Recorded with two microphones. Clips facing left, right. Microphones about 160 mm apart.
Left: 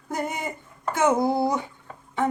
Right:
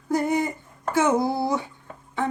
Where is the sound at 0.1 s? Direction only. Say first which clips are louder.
Right 6 dB; 20° left (ahead or behind).